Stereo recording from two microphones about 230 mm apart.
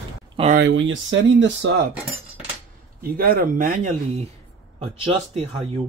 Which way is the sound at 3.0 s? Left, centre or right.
Right.